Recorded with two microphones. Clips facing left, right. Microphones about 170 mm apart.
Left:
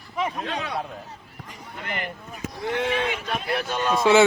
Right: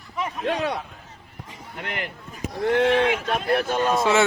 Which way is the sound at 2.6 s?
55° right (ahead or behind).